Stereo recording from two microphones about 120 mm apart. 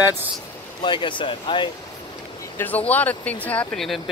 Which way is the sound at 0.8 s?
40° left (ahead or behind).